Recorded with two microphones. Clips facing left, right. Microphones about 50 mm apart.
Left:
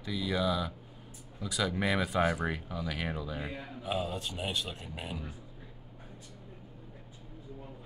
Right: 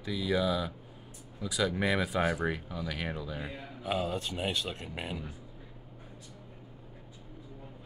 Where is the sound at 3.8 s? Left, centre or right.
Right.